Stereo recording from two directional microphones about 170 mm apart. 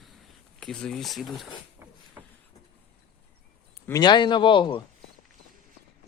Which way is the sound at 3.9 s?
25° left (ahead or behind).